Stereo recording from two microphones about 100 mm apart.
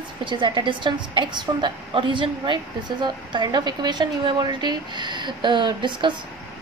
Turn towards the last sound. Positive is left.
turn(degrees=-55)  # may be behind; listen again after turning